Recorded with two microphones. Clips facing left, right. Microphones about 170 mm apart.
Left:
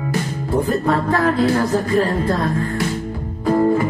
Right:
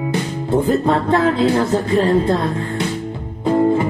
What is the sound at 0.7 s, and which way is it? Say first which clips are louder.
Music: right 3 dB; 20° right (ahead or behind).